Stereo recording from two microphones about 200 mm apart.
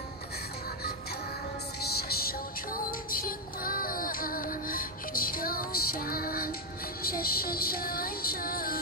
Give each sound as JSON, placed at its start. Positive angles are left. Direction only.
{"t": 1.8, "sound": "music", "side_deg": 50}